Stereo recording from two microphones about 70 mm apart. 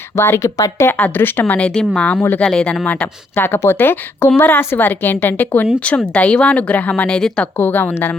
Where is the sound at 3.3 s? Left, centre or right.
Left.